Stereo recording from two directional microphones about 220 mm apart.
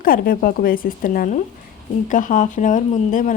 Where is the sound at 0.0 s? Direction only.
40° left (ahead or behind).